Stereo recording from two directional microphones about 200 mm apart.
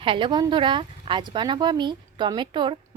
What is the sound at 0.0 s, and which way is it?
A woman's voice, 25° right (ahead or behind).